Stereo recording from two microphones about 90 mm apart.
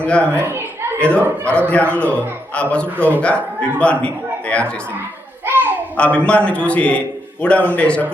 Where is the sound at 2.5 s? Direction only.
15° left (ahead or behind).